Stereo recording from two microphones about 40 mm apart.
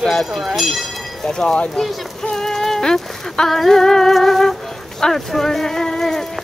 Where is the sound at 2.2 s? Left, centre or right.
Centre.